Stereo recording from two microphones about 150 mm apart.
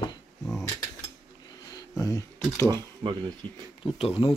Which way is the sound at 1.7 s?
25° left (ahead or behind).